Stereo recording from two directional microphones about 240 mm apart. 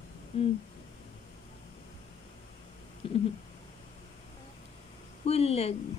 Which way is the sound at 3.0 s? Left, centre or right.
Left.